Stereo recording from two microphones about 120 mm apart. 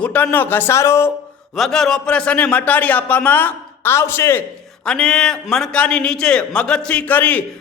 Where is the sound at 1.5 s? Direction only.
Centre (ahead or behind); by 4.4 s 20° left (ahead or behind).